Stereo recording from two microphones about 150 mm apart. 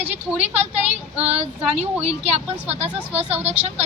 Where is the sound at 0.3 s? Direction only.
45° right (ahead or behind).